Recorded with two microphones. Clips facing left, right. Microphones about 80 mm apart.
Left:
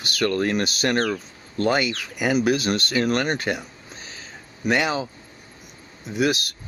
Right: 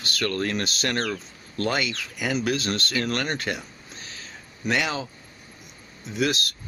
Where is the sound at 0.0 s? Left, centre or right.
Centre.